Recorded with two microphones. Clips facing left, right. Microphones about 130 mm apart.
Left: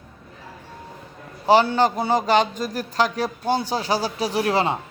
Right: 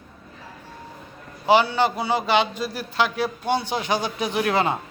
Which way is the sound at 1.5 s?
40° left (ahead or behind).